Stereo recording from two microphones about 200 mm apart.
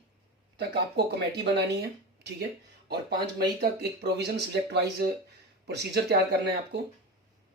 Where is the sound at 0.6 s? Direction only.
55° right (ahead or behind).